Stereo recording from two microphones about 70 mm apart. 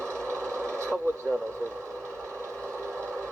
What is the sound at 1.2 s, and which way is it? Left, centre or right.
Speech, left.